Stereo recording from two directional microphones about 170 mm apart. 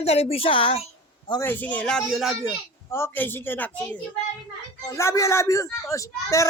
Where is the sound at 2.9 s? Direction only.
15° left (ahead or behind).